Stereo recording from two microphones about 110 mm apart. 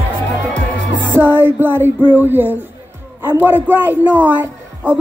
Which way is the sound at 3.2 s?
20° right (ahead or behind).